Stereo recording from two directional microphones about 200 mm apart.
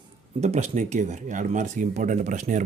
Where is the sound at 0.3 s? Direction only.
35° right (ahead or behind).